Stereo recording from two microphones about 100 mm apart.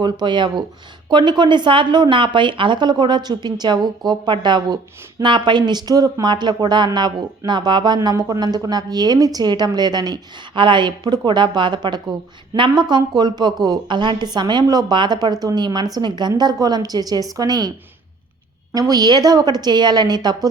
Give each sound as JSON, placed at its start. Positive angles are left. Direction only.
{"t": 0.0, "sound": "a woman's voice", "side_deg": -50}
{"t": 18.7, "sound": "speech", "side_deg": -40}